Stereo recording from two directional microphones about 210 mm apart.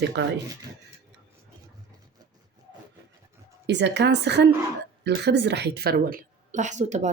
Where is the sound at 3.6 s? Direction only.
55° right (ahead or behind).